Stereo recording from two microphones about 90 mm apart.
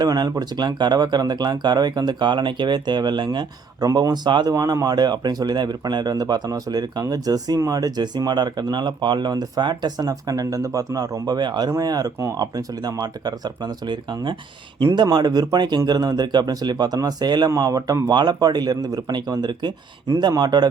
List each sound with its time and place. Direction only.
0.0 s speech: 45° right (ahead or behind)
17.5 s speech: 40° right (ahead or behind)